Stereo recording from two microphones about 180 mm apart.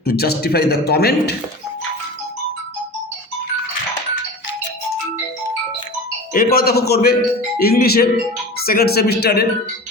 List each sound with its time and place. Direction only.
0.0 s speech: 60° left (ahead or behind)
6.3 s speech: 55° left (ahead or behind)